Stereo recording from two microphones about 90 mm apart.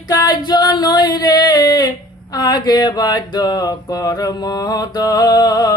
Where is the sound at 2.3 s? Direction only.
50° left (ahead or behind).